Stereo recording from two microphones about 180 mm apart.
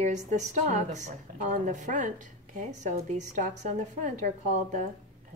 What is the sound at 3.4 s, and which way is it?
A woman's voice, 45° right (ahead or behind).